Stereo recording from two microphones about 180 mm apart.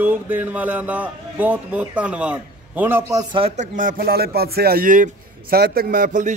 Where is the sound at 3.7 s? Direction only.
50° right (ahead or behind).